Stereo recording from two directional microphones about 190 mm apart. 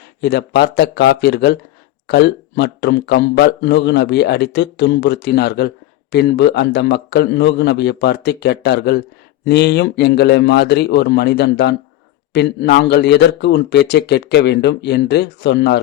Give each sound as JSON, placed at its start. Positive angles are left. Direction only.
{"t": 0.2, "sound": "a man's voice", "side_deg": 60}